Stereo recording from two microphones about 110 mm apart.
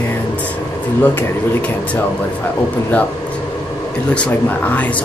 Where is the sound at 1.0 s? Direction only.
15° left (ahead or behind).